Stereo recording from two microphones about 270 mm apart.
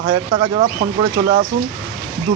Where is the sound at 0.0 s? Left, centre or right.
Centre.